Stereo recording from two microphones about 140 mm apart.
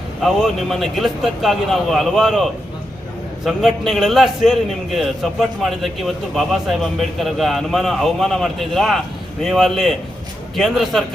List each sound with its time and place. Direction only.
0.2 s a man's voice: centre (ahead or behind)
7.2 s a man's voice: centre (ahead or behind)